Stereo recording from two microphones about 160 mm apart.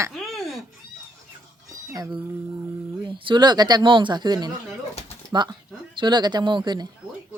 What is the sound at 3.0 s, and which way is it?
Speech, 30° right (ahead or behind).